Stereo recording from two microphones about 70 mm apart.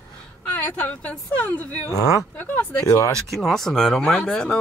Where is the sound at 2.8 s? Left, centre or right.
Left.